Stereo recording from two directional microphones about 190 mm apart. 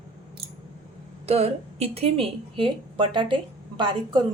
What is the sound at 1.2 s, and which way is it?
A woman's voice, 35° right (ahead or behind).